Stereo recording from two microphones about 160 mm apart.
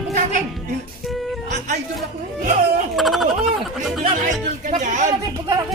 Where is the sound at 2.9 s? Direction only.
Centre (ahead or behind).